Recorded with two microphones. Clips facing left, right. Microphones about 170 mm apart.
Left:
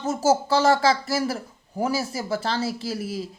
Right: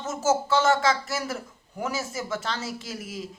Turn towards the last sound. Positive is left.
turn(degrees=35)  # may be behind; listen again after turning